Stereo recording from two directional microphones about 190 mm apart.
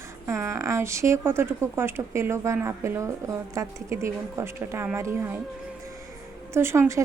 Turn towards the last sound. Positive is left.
turn(degrees=-15)  # may be behind; listen again after turning